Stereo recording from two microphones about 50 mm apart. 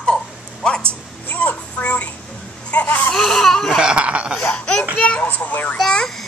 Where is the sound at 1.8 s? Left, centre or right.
Left.